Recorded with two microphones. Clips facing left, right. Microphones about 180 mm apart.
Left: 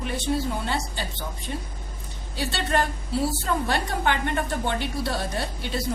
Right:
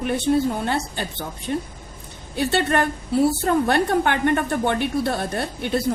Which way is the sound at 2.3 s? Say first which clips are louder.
Right 5 dB; 55° right (ahead or behind).